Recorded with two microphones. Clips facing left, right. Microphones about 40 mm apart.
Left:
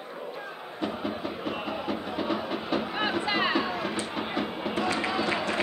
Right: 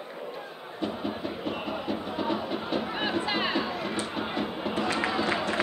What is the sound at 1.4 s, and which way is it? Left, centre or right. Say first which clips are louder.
Music: even; left.